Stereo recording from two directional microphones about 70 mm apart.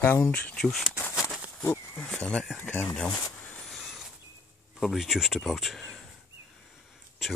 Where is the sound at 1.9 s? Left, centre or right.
Centre.